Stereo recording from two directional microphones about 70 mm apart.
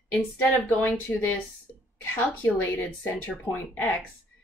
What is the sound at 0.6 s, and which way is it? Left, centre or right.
Speech, left.